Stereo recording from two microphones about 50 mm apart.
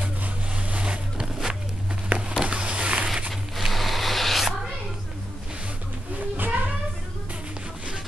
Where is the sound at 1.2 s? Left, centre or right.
Centre.